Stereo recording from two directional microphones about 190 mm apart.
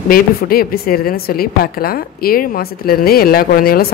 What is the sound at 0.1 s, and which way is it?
A woman's voice, 50° left (ahead or behind).